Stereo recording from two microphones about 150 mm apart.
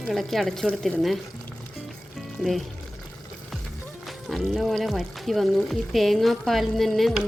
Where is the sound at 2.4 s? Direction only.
Centre (ahead or behind).